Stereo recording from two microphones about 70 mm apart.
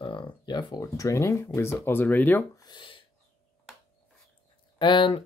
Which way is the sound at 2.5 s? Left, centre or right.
Left.